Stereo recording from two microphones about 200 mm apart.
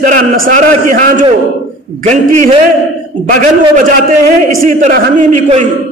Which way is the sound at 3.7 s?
40° right (ahead or behind).